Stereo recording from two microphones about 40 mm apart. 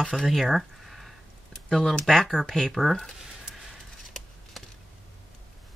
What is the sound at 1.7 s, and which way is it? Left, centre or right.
Speech, centre.